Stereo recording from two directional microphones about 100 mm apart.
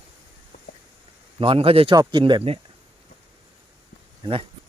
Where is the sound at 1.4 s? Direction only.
65° right (ahead or behind).